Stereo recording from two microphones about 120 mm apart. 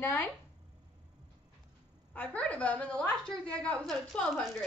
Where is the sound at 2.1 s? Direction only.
10° left (ahead or behind).